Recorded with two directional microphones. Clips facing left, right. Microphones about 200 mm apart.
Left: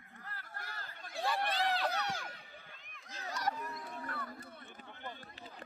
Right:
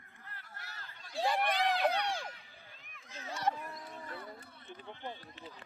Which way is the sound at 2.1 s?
30° right (ahead or behind).